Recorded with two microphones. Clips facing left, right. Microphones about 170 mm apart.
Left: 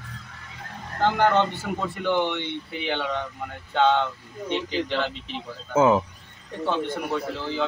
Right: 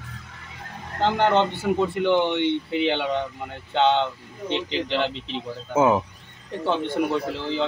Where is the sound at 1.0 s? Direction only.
20° right (ahead or behind).